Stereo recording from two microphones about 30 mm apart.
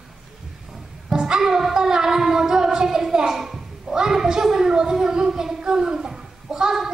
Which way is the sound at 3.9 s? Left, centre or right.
Right.